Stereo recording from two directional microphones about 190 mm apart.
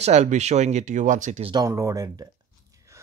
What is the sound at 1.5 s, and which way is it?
Speech, 20° right (ahead or behind).